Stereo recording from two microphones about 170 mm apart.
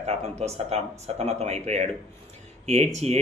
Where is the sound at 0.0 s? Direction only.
40° right (ahead or behind).